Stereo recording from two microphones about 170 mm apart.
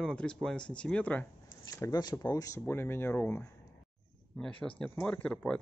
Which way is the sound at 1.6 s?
20° left (ahead or behind).